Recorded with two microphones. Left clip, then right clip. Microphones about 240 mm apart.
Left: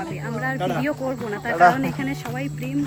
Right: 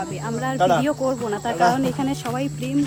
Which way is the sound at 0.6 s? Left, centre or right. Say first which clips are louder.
Right 11 dB; centre.